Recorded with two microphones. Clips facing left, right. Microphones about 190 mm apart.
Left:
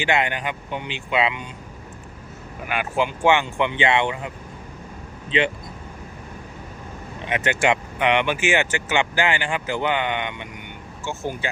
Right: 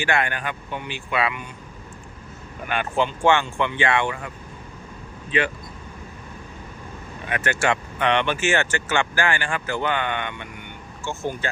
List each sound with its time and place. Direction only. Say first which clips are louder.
0.0 s speech: left 1 dB; 20° left (ahead or behind)
2.6 s speech: even; 10° left (ahead or behind)
5.3 s speech: left 2 dB; 20° left (ahead or behind)
7.3 s speech: left 2 dB; 20° left (ahead or behind)